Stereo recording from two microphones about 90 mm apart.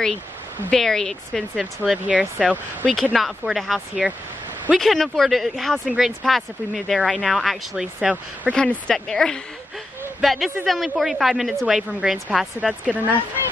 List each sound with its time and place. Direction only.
0.7 s speech: 5° left (ahead or behind)
1.6 s speech: 10° right (ahead or behind)
2.9 s speech: 5° left (ahead or behind)
8.5 s a woman's voice: 10° left (ahead or behind); by 12.4 s 5° right (ahead or behind)
12.9 s speech: 15° right (ahead or behind)